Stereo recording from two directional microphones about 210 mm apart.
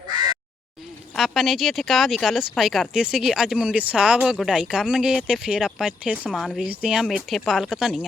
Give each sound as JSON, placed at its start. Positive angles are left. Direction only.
{"t": 1.1, "sound": "speech", "side_deg": 0}